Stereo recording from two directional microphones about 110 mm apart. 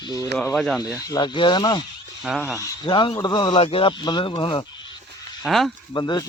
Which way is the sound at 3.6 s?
55° left (ahead or behind).